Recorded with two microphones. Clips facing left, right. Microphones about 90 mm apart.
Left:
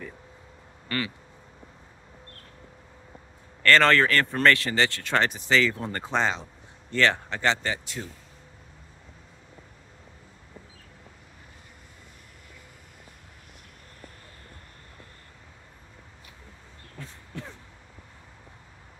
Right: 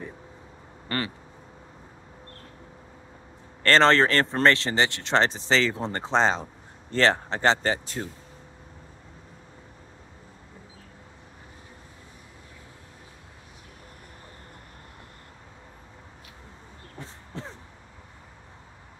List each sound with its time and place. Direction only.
0.8 s speech: 35° right (ahead or behind)
3.6 s speech: 25° right (ahead or behind)
17.0 s a sound: 30° right (ahead or behind)